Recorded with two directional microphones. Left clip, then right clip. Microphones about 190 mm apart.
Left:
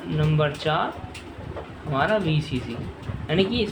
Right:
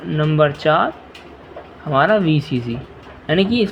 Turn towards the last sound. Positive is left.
turn(degrees=-40)  # may be behind; listen again after turning